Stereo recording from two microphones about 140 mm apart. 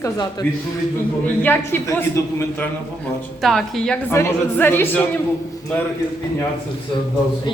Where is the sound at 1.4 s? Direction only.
15° left (ahead or behind).